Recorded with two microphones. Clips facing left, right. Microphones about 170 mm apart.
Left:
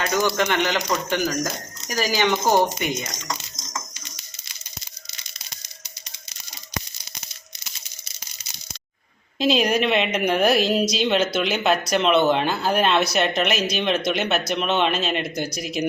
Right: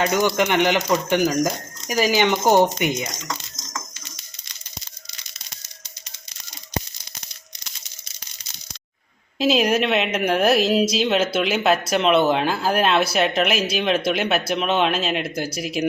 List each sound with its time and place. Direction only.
0.0 s a man's voice: 20° right (ahead or behind)
9.4 s a woman's voice: 5° right (ahead or behind)